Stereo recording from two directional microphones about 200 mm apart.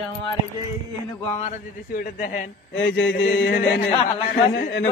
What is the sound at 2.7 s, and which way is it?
Mantra, 70° left (ahead or behind).